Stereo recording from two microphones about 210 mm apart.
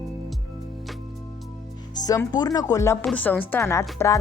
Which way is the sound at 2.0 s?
15° left (ahead or behind).